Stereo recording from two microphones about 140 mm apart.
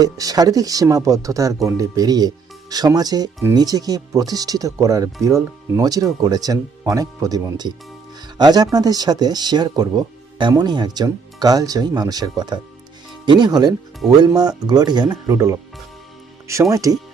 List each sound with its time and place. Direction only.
0.0 s speech: 25° right (ahead or behind)
16.7 s speech: 25° right (ahead or behind)